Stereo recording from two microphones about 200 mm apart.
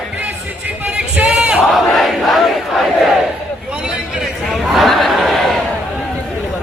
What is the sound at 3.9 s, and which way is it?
Chatter, centre (ahead or behind).